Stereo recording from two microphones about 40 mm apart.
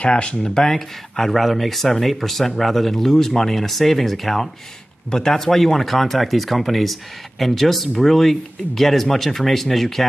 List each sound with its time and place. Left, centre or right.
0.0 s speech: left
0.6 s speech: centre
5.1 s speech: centre